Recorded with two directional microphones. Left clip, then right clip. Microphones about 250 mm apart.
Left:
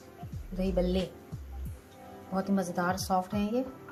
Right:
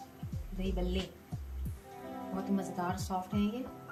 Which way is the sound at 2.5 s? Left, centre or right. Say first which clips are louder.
Left 6 dB; left.